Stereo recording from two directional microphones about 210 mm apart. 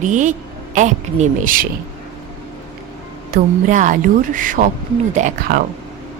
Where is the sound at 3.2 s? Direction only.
40° right (ahead or behind).